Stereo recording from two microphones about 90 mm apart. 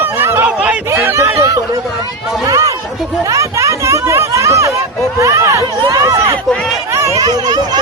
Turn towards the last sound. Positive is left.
turn(degrees=-50)  # may be behind; listen again after turning